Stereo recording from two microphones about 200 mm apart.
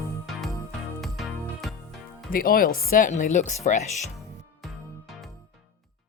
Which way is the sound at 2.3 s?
45° left (ahead or behind).